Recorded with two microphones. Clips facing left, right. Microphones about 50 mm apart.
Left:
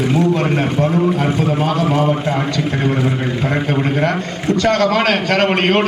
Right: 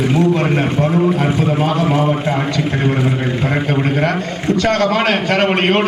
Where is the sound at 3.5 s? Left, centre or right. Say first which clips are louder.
Even; centre.